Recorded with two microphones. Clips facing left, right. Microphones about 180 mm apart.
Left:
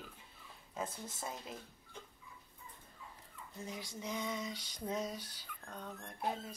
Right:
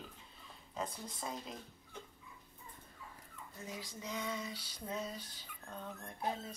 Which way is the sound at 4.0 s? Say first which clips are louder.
Left 1 dB; 20° left (ahead or behind).